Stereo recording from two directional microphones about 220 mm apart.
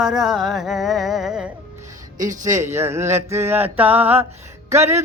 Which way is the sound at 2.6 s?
10° right (ahead or behind).